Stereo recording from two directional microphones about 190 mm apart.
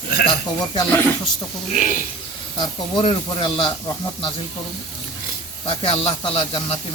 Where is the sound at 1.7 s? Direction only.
40° left (ahead or behind).